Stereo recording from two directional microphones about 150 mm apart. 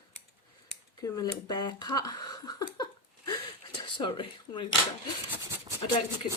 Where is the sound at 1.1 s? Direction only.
25° left (ahead or behind).